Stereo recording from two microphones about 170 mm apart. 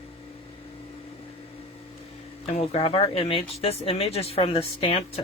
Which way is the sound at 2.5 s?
35° left (ahead or behind).